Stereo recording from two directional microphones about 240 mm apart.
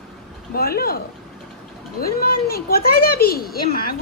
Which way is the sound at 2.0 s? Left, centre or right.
Left.